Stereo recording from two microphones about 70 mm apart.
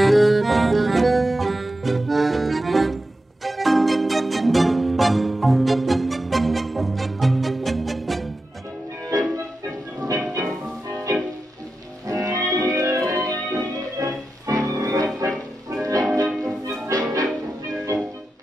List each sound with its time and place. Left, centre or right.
0.0 s music: centre
9.1 s organ: right
10.0 s music: right
12.1 s music: right
16.9 s music: right